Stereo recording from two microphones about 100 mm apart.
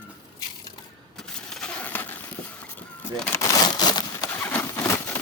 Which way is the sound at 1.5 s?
10° left (ahead or behind).